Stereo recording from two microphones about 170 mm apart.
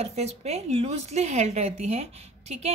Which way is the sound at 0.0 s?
40° right (ahead or behind).